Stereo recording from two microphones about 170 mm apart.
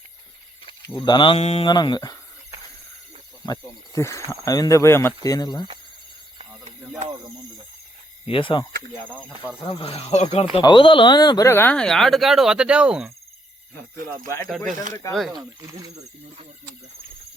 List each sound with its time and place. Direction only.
0.9 s speech: 25° left (ahead or behind)
1.6 s speech: 25° left (ahead or behind)
3.4 s speech: 20° left (ahead or behind)
8.3 s speech: 30° left (ahead or behind)
9.6 s speech: 35° left (ahead or behind)
10.5 s speech: 30° left (ahead or behind); by 13.1 s 5° right (ahead or behind)
15.1 s speech: centre (ahead or behind)